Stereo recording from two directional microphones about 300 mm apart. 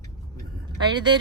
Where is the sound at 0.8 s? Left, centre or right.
Centre.